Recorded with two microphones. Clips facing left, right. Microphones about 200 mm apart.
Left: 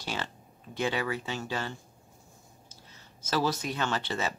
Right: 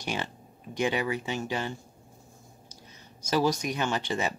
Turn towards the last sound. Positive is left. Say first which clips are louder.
# right 2 dB
turn(degrees=-15)  # may be behind; listen again after turning